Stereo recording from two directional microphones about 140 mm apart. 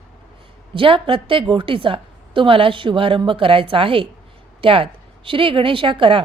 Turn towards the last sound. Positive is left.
turn(degrees=-35)  # may be behind; listen again after turning